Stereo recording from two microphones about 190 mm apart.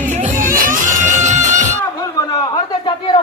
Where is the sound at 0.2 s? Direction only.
45° right (ahead or behind).